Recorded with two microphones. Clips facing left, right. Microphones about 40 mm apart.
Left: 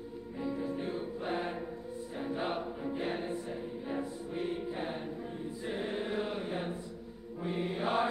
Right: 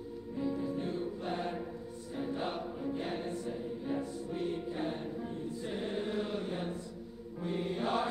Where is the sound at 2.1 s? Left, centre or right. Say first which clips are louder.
Left 1 dB; centre.